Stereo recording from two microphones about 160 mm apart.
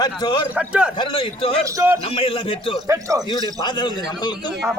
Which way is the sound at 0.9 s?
30° left (ahead or behind).